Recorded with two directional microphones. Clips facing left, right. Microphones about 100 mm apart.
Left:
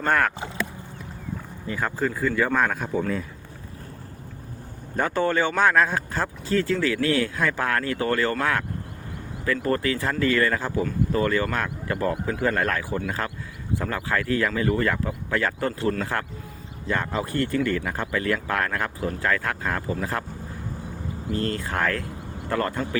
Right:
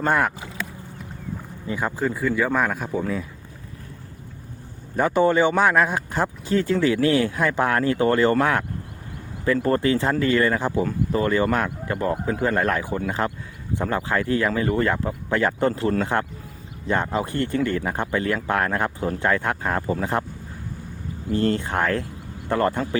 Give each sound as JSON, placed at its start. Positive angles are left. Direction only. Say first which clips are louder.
{"t": 0.0, "sound": "speech", "louder": "right 1 dB", "side_deg": -15}
{"t": 1.6, "sound": "speech", "louder": "right 2 dB", "side_deg": -15}
{"t": 4.9, "sound": "speech", "louder": "right 5 dB", "side_deg": -15}
{"t": 9.6, "sound": "speech", "louder": "right 3 dB", "side_deg": -25}
{"t": 21.3, "sound": "speech", "louder": "right 5 dB", "side_deg": -25}